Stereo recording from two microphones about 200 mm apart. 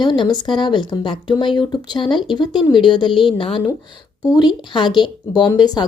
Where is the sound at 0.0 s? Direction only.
20° left (ahead or behind).